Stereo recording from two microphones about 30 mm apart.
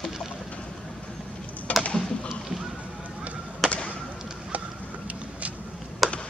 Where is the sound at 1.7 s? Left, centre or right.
Left.